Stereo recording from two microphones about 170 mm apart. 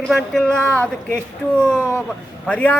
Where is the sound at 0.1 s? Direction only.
5° left (ahead or behind).